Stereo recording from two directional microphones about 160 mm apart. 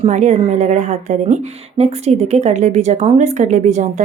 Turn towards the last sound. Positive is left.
turn(degrees=-45)  # may be behind; listen again after turning